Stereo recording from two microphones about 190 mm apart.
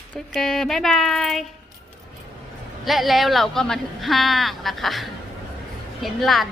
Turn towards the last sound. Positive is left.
turn(degrees=0)  # may be behind; listen again after turning